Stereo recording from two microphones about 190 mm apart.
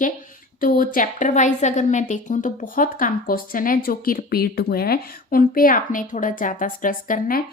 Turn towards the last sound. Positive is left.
turn(degrees=45)  # may be behind; listen again after turning